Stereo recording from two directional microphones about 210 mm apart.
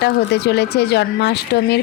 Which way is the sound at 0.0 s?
50° left (ahead or behind).